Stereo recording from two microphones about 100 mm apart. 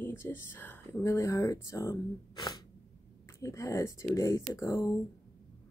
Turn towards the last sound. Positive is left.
turn(degrees=30)  # may be behind; listen again after turning